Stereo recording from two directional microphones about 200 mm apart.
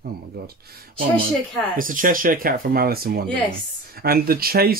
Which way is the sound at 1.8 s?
45° right (ahead or behind).